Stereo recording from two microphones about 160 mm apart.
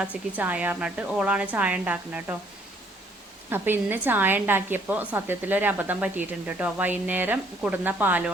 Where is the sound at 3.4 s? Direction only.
15° right (ahead or behind).